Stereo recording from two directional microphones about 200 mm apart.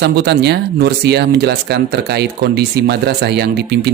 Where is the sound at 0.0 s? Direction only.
55° right (ahead or behind).